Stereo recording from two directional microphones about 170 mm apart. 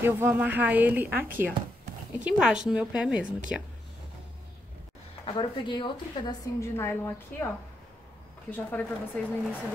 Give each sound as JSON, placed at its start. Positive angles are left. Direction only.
{"t": 0.0, "sound": "speech", "side_deg": -15}
{"t": 5.2, "sound": "a woman's voice", "side_deg": 30}
{"t": 6.8, "sound": "a woman's voice", "side_deg": 15}
{"t": 8.5, "sound": "a woman's voice", "side_deg": 10}